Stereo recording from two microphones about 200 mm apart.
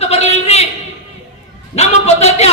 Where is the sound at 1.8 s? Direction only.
35° left (ahead or behind).